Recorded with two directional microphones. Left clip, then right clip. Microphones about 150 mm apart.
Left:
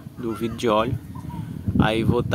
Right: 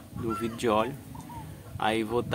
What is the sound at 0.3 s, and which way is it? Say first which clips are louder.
Speech: left 5 dB; 30° left (ahead or behind).